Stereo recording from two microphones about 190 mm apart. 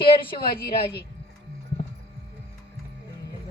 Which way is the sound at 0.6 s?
60° left (ahead or behind).